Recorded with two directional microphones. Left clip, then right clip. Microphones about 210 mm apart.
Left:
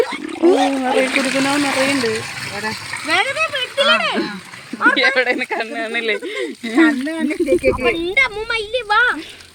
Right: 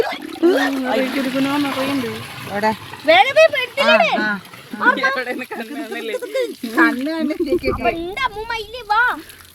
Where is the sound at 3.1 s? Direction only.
35° right (ahead or behind).